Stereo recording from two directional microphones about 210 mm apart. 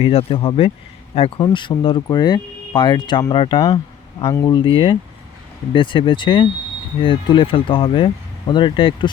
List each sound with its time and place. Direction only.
0.0 s speech: 25° left (ahead or behind)